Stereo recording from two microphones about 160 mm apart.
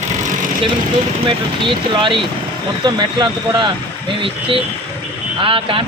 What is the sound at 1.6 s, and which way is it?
Speech, 30° right (ahead or behind).